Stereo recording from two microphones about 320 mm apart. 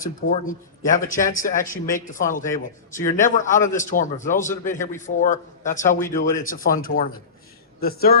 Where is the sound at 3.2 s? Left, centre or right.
Left.